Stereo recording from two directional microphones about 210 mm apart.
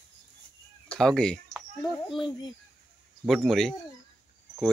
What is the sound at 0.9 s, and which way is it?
Speech, centre (ahead or behind).